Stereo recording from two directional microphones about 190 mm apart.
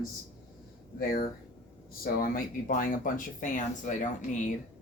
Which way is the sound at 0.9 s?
50° left (ahead or behind).